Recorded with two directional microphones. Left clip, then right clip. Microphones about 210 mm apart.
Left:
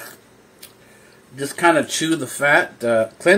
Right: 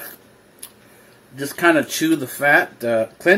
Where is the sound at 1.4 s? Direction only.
5° left (ahead or behind).